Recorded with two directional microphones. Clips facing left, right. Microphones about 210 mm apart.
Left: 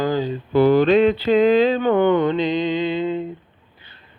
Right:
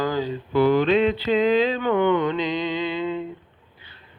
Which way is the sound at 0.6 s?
35° left (ahead or behind).